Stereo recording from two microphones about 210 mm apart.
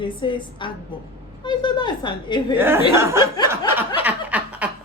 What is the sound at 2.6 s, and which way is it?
Speech, 10° right (ahead or behind).